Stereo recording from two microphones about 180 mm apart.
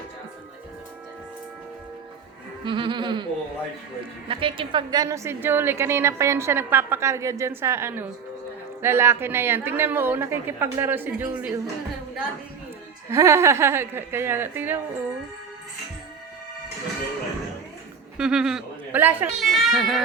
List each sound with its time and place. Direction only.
2.6 s music: 25° right (ahead or behind)
4.3 s a woman's voice: 30° right (ahead or behind); by 11.7 s 15° right (ahead or behind)
13.1 s a woman's voice: 15° right (ahead or behind)
18.2 s a man's voice: 5° right (ahead or behind)
19.4 s a child's voice: centre (ahead or behind)